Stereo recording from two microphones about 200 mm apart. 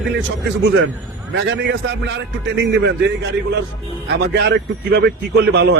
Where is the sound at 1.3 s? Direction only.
60° right (ahead or behind).